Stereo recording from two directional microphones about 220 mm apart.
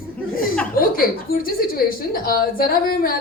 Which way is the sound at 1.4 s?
40° left (ahead or behind).